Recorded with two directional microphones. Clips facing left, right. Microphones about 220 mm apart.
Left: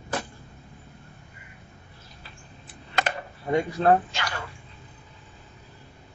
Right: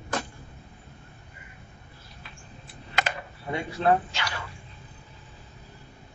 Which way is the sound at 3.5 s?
40° left (ahead or behind).